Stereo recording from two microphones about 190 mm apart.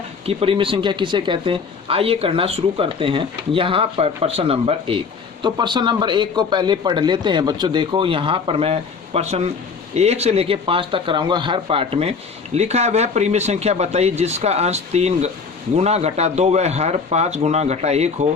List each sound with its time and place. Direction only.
0.3 s speech: 30° right (ahead or behind)